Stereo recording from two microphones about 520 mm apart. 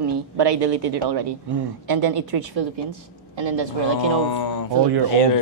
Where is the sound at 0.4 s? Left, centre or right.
Right.